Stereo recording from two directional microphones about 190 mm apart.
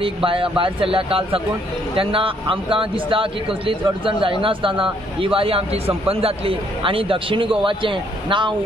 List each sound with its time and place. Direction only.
0.0 s speech: 30° right (ahead or behind)